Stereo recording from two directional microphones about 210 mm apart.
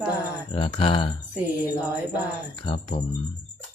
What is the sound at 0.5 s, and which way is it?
Speech, 25° left (ahead or behind).